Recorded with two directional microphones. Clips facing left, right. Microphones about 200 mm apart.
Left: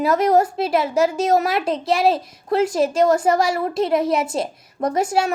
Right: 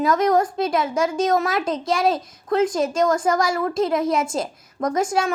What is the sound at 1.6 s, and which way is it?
Speech, 30° left (ahead or behind).